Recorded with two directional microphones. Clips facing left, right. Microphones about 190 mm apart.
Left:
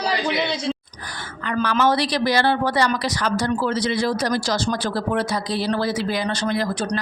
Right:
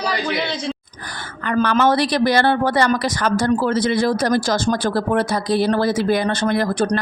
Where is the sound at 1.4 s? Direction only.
55° right (ahead or behind).